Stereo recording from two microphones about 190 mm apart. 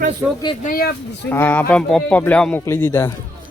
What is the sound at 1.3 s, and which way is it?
Speech, 10° left (ahead or behind).